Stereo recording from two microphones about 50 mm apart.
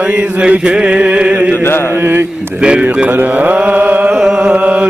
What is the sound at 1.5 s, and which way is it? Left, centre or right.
Music, left.